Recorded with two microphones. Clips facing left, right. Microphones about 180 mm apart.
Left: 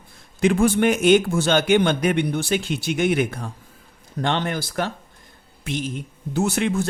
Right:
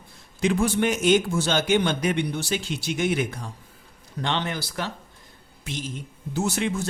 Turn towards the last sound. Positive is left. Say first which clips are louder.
# left 4 dB
turn(degrees=60)  # may be behind; listen again after turning